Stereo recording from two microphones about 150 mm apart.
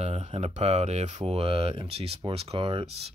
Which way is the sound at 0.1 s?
35° right (ahead or behind).